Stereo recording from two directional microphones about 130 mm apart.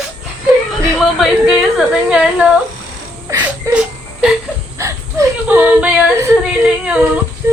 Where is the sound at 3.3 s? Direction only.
25° right (ahead or behind).